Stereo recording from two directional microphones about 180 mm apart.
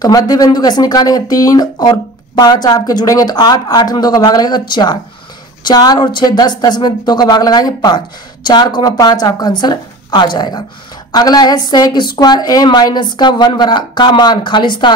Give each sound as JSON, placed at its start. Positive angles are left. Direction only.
{"t": 0.0, "sound": "speech", "side_deg": 20}